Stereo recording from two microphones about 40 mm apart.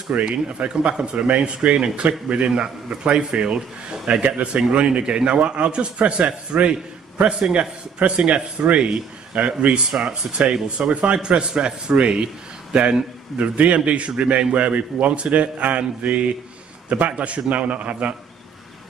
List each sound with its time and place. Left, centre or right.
0.1 s a man's voice: right
13.4 s a man's voice: right